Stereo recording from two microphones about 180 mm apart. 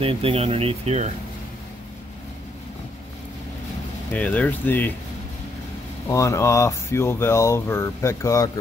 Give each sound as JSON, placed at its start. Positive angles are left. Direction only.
{"t": 0.0, "sound": "speech", "side_deg": -30}
{"t": 4.1, "sound": "speech", "side_deg": 10}
{"t": 6.0, "sound": "speech", "side_deg": 15}